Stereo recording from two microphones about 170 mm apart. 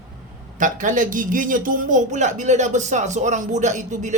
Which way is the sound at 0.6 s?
50° right (ahead or behind).